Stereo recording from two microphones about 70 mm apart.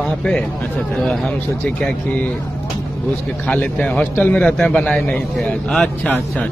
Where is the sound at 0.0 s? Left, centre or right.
Centre.